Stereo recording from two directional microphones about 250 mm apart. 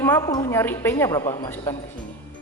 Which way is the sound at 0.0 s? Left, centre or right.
Centre.